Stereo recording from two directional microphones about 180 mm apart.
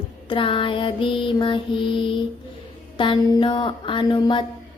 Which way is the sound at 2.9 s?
25° left (ahead or behind).